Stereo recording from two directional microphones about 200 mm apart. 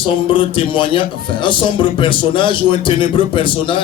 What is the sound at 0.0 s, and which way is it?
A man's voice, 25° left (ahead or behind).